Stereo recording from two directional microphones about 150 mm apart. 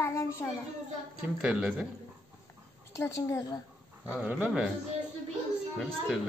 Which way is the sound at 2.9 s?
20° left (ahead or behind).